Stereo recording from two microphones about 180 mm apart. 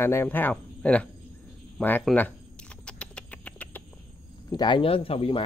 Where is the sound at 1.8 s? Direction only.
10° left (ahead or behind).